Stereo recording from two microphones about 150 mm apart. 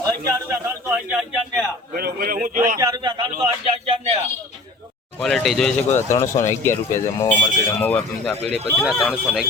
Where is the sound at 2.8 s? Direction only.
25° right (ahead or behind).